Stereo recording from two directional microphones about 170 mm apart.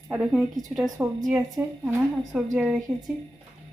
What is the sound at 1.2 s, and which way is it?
Speech, 20° right (ahead or behind).